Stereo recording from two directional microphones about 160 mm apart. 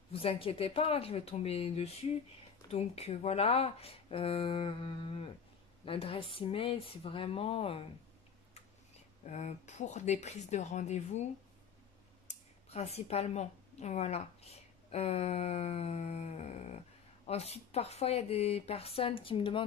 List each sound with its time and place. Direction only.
0.1 s speech: 35° left (ahead or behind)
8.9 s a woman's voice: 45° left (ahead or behind)
12.6 s a woman's voice: 40° left (ahead or behind)